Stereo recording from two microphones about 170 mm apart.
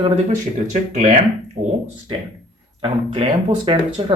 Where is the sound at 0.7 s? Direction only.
45° right (ahead or behind).